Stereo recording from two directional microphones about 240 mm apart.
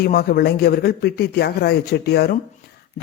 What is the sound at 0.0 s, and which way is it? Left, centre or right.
A man's voice, left.